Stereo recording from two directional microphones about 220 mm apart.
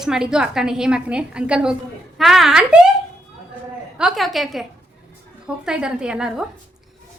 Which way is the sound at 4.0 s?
Centre (ahead or behind).